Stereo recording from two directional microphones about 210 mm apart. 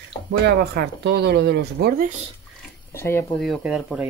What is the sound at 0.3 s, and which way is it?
Speech, 50° right (ahead or behind).